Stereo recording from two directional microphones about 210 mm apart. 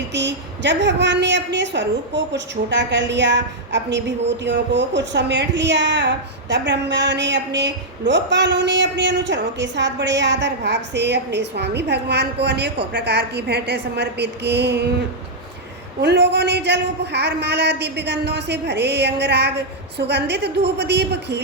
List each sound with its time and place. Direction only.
0.1 s a woman's voice: 55° right (ahead or behind)
16.0 s a man's voice: 55° right (ahead or behind)